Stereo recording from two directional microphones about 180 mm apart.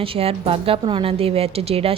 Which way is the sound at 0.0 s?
30° right (ahead or behind).